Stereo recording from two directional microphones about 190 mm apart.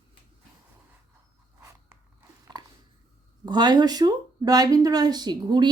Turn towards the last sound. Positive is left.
turn(degrees=-25)  # may be behind; listen again after turning